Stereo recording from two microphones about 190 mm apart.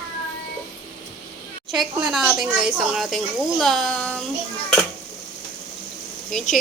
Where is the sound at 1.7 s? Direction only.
Centre (ahead or behind).